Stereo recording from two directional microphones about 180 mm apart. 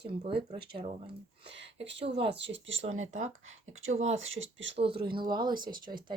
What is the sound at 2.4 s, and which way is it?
Speech, 90° right.